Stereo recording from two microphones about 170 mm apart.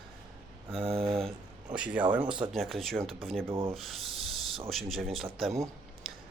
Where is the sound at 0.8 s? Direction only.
35° right (ahead or behind).